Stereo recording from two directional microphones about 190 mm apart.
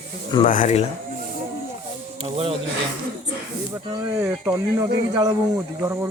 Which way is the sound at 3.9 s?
25° right (ahead or behind).